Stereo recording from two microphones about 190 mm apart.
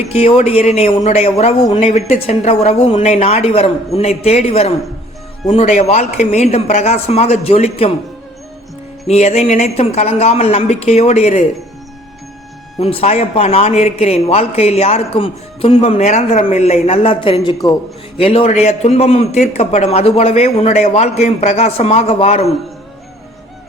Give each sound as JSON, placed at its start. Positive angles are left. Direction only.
{"t": 0.0, "sound": "a man's voice", "side_deg": 30}
{"t": 9.0, "sound": "a man's voice", "side_deg": 35}
{"t": 12.8, "sound": "a man's voice", "side_deg": 30}